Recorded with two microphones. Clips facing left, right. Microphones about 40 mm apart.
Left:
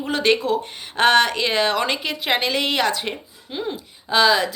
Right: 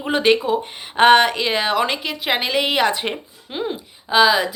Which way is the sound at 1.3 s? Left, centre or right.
Centre.